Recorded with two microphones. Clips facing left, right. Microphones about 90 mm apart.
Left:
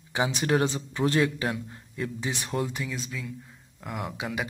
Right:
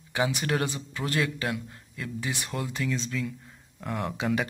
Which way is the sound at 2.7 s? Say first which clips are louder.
Right 4 dB; 10° left (ahead or behind).